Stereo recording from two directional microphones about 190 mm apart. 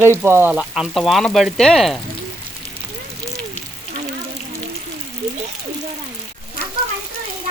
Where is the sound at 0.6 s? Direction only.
Centre (ahead or behind).